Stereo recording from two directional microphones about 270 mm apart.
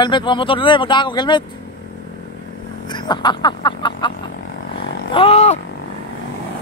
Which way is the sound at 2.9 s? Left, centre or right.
Centre.